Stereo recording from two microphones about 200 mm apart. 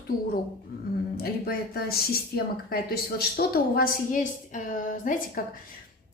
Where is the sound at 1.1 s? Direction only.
50° left (ahead or behind).